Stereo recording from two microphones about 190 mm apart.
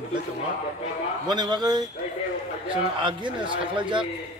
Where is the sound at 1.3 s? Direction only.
20° right (ahead or behind).